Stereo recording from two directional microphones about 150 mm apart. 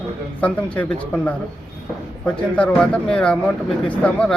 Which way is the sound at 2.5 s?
10° left (ahead or behind).